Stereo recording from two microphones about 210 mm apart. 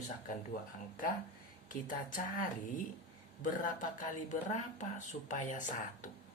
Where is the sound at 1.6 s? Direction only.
40° left (ahead or behind).